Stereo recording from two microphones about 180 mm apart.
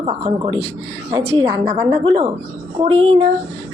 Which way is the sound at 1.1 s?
30° right (ahead or behind).